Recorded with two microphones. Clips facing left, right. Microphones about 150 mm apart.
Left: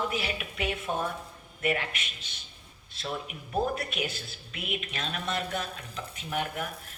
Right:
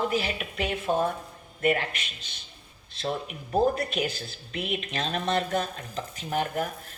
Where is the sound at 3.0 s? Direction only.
40° right (ahead or behind).